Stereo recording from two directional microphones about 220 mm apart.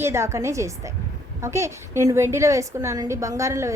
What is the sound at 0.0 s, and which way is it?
A woman's voice, 10° right (ahead or behind).